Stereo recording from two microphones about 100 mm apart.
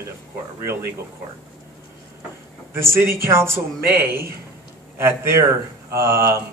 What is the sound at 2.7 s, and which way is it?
A man's voice, 25° right (ahead or behind).